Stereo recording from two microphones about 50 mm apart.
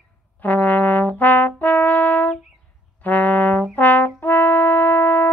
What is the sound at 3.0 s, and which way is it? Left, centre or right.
Music, left.